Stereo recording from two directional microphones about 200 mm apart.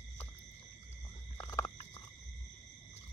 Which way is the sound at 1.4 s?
15° left (ahead or behind).